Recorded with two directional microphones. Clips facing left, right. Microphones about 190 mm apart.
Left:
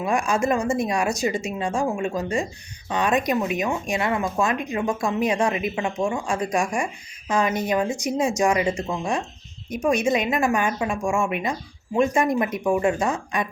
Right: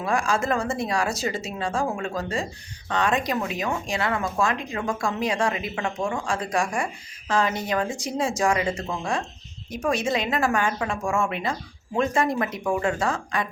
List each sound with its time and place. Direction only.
0.0 s a woman's voice: 20° left (ahead or behind)